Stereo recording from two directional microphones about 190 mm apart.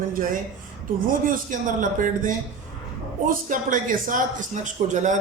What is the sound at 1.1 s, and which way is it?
A man's voice, 45° right (ahead or behind).